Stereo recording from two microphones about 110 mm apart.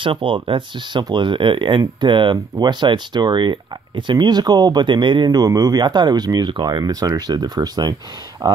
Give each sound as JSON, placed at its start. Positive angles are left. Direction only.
{"t": 0.0, "sound": "speech", "side_deg": -50}